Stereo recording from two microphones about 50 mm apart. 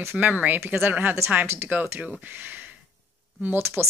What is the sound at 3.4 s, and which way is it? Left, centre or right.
Speech, right.